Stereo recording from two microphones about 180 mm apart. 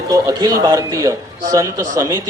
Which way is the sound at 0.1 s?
20° right (ahead or behind).